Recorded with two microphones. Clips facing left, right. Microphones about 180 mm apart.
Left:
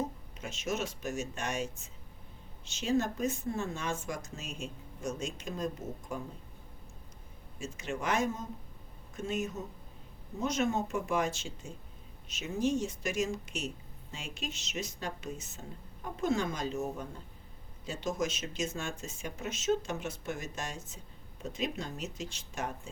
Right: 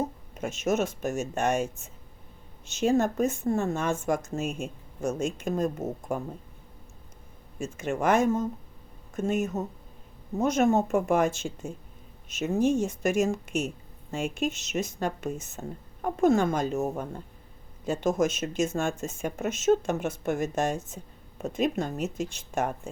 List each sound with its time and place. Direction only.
0.3 s speech: 50° right (ahead or behind)
7.6 s speech: 50° right (ahead or behind)